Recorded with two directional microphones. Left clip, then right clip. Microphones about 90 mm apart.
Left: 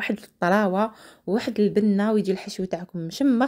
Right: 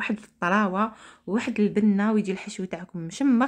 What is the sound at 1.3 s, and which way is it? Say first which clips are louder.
Speech: left 3 dB; 25° left (ahead or behind).